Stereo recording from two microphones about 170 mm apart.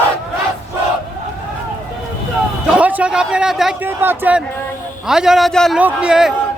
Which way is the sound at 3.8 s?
10° right (ahead or behind).